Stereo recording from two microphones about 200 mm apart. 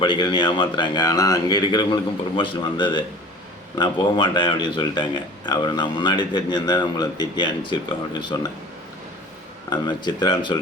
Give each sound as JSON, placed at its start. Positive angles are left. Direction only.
{"t": 0.0, "sound": "speech", "side_deg": 25}
{"t": 9.6, "sound": "speech", "side_deg": 20}